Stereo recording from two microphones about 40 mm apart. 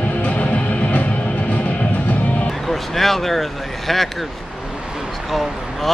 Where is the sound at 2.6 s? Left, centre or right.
Centre.